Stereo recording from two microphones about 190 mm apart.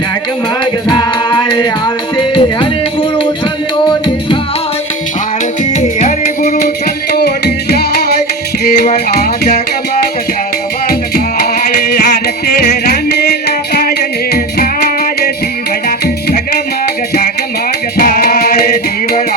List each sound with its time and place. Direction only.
0.6 s music: 20° left (ahead or behind)
5.7 s music: 40° left (ahead or behind)
7.1 s music: 55° left (ahead or behind)
11.6 s music: 50° left (ahead or behind)
14.3 s music: 50° left (ahead or behind)
17.9 s music: 50° left (ahead or behind)